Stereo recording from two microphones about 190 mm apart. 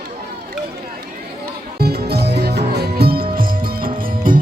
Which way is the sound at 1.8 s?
55° right (ahead or behind).